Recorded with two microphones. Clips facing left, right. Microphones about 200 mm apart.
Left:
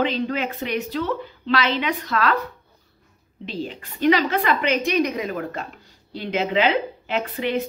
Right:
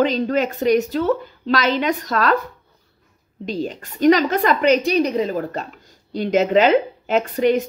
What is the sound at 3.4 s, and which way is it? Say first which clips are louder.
A woman's voice: right 5 dB; 45° right (ahead or behind).